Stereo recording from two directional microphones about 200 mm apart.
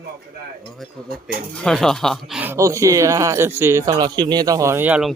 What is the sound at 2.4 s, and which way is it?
A man's voice, 15° right (ahead or behind).